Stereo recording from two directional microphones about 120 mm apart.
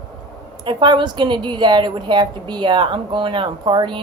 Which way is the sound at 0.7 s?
40° right (ahead or behind).